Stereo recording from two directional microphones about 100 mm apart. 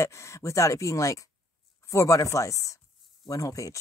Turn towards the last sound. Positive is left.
turn(degrees=35)  # may be behind; listen again after turning